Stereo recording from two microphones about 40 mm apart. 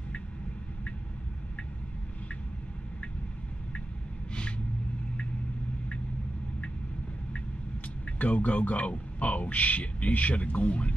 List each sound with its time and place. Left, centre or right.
8.2 s speech: left